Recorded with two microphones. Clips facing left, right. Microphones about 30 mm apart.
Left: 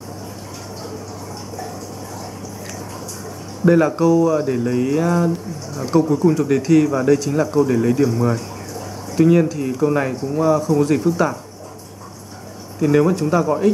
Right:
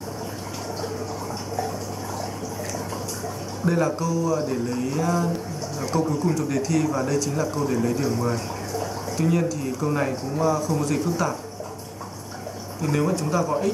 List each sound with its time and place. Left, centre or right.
3.6 s speech: left
9.1 s speech: centre
12.8 s speech: centre